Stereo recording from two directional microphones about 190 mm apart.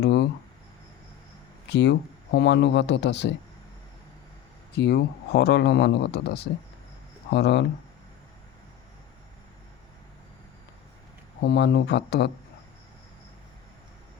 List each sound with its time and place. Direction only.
0.0 s a sound: 55° left (ahead or behind)
1.7 s speech: 65° left (ahead or behind)
4.7 s speech: 60° left (ahead or behind)
11.4 s speech: 65° left (ahead or behind)